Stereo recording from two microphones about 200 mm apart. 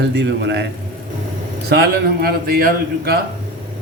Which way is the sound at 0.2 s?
60° right (ahead or behind).